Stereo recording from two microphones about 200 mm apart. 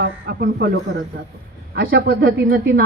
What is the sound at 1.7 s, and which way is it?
A woman's voice, 50° right (ahead or behind).